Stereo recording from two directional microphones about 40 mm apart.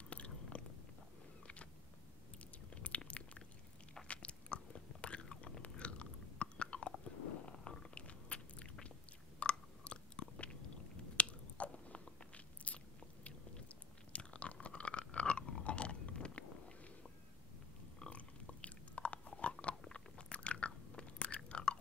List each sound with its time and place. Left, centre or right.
0.1 s biting: left
2.7 s a sound: left
4.1 s biting: left
5.6 s chewing: left
7.5 s stomach rumble: centre
7.9 s biting: left
9.4 s chewing: left
12.6 s biting: left
14.1 s chewing: left
18.1 s chewing: left
19.6 s biting: left
21.5 s chewing: left